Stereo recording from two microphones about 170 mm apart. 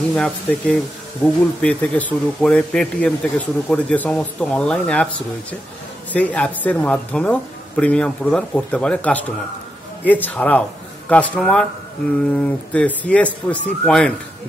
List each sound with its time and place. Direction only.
0.1 s speech: 5° left (ahead or behind)